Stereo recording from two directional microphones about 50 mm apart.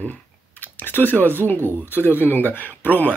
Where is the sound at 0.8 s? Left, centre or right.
Left.